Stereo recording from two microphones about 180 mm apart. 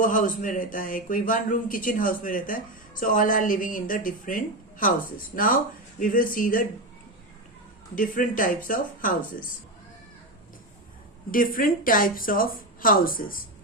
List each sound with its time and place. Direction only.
0.0 s a woman's voice: 45° left (ahead or behind)
7.9 s a woman's voice: 50° left (ahead or behind)
11.3 s a woman's voice: 50° left (ahead or behind)